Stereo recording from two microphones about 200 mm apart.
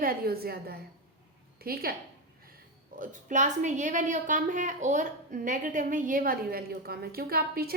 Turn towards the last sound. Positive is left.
turn(degrees=-50)  # may be behind; listen again after turning